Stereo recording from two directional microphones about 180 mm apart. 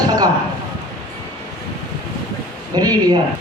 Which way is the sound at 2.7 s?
20° right (ahead or behind).